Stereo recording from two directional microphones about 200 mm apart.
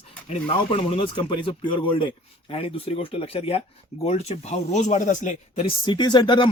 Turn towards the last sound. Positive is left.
turn(degrees=20)  # may be behind; listen again after turning